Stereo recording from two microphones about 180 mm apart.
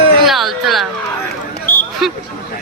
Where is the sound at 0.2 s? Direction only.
Centre (ahead or behind).